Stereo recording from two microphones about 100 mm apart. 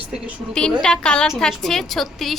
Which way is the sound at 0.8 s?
10° left (ahead or behind).